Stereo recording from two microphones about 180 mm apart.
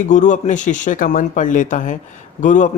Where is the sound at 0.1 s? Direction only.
45° left (ahead or behind).